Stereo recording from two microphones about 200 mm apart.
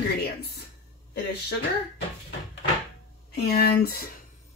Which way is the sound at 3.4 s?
50° left (ahead or behind).